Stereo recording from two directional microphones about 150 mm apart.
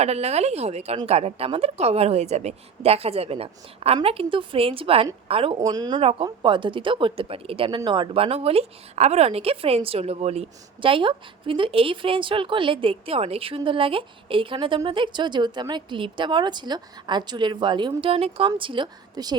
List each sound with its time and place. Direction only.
0.0 s a woman's voice: 45° right (ahead or behind)
5.5 s speech: 25° right (ahead or behind)
6.0 s a woman's voice: 40° right (ahead or behind)